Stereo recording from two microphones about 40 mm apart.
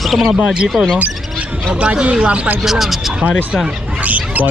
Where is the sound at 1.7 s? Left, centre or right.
Right.